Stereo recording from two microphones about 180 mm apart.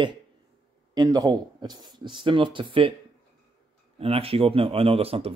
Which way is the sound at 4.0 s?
30° right (ahead or behind).